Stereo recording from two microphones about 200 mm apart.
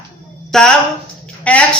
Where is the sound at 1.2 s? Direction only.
5° left (ahead or behind).